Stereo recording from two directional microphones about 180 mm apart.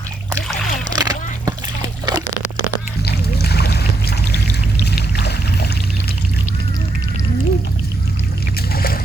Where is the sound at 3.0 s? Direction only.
65° left (ahead or behind).